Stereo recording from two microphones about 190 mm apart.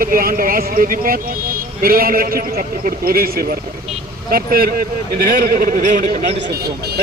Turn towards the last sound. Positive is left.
turn(degrees=-50)  # may be behind; listen again after turning